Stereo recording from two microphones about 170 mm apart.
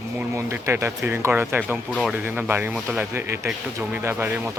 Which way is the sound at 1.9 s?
5° left (ahead or behind).